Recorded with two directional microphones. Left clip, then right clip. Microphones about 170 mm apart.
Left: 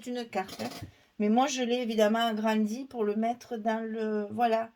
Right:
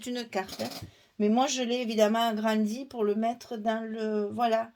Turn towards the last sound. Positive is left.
turn(degrees=-45)  # may be behind; listen again after turning